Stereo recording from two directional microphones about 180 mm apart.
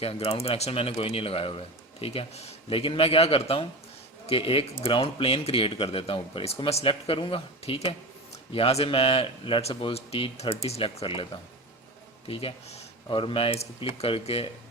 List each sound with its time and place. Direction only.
0.0 s speech: 35° left (ahead or behind)
12.3 s speech: 30° left (ahead or behind)